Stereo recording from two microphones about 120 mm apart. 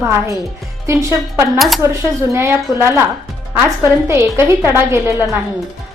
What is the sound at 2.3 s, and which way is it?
A woman's voice, 20° right (ahead or behind).